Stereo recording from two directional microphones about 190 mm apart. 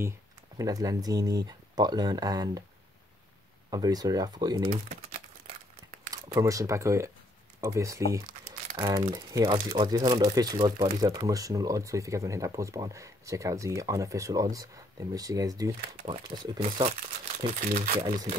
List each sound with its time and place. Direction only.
0.6 s speech: 20° right (ahead or behind)
3.7 s speech: 20° right (ahead or behind)
6.2 s speech: 15° right (ahead or behind)
17.6 s speech: 45° right (ahead or behind)
18.0 s speech: 20° right (ahead or behind)